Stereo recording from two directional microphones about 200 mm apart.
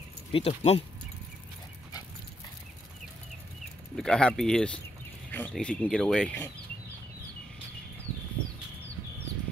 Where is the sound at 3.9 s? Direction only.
5° left (ahead or behind).